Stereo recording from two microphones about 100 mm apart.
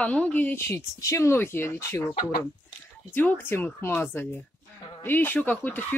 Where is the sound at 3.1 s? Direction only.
20° left (ahead or behind).